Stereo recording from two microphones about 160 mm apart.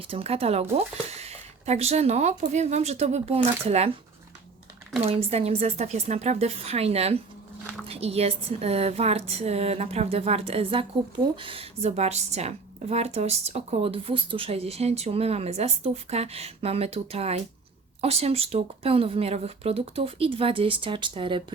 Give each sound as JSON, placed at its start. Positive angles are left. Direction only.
{"t": 0.1, "sound": "a woman's voice", "side_deg": -40}
{"t": 5.0, "sound": "a woman's voice", "side_deg": -40}